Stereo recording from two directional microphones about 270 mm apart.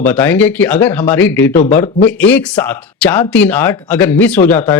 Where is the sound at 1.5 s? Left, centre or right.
Left.